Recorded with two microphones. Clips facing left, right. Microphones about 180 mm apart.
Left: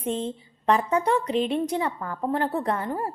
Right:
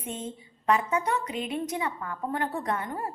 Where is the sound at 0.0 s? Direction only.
35° left (ahead or behind).